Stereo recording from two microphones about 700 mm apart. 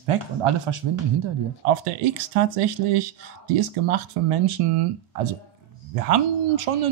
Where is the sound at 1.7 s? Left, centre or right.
Right.